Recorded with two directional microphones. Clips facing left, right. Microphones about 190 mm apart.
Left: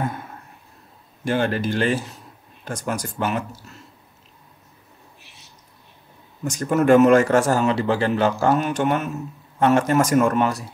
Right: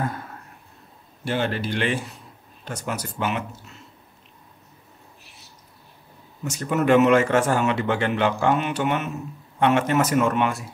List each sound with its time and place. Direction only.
1.2 s speech: 45° left (ahead or behind)
6.5 s speech: 45° left (ahead or behind)